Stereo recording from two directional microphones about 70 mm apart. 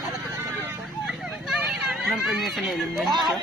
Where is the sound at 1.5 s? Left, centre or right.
Centre.